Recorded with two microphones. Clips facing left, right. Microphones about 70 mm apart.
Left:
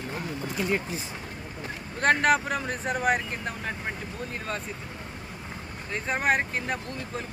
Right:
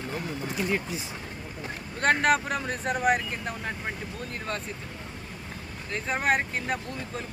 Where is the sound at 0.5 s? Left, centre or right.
Left.